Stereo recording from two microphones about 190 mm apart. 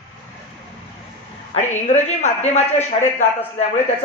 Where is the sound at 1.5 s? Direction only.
35° left (ahead or behind).